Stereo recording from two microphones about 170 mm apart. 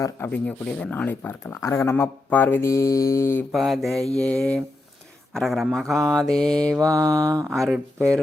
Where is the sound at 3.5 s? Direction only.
Centre (ahead or behind).